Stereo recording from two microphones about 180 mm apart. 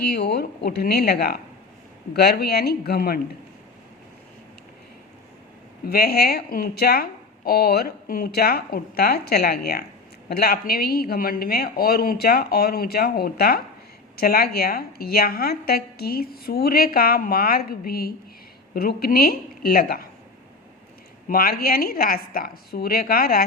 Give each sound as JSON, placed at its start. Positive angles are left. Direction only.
{"t": 0.0, "sound": "a woman's voice", "side_deg": 65}
{"t": 5.8, "sound": "a woman's voice", "side_deg": 60}
{"t": 21.2, "sound": "a woman's voice", "side_deg": 55}